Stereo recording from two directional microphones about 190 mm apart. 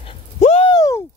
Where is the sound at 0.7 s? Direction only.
20° left (ahead or behind).